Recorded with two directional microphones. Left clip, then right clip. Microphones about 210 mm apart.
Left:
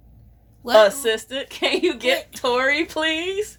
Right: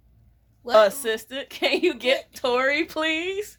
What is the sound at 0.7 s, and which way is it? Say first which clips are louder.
A woman's voice: left 3 dB; 30° right (ahead or behind).